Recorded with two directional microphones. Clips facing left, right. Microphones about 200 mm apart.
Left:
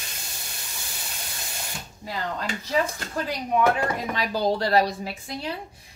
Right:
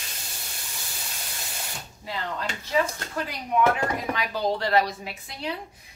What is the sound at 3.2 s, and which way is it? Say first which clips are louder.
Speech: left 1 dB; 40° left (ahead or behind).